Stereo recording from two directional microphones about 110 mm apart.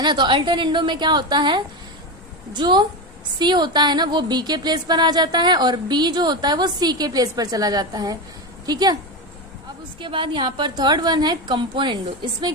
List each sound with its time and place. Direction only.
0.0 s a woman's voice: 45° right (ahead or behind)
10.0 s a woman's voice: 50° right (ahead or behind)